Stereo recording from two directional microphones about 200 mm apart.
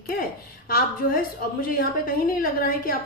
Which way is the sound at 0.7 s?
45° left (ahead or behind).